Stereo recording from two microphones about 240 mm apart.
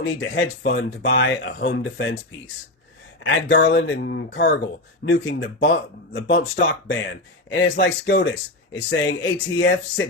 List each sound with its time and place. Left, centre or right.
0.0 s speech: left
3.2 s speech: left